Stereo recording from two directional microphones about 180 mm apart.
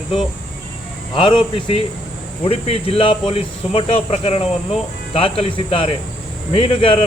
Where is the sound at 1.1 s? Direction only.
30° left (ahead or behind).